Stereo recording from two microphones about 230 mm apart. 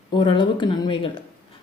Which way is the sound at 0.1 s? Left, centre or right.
Left.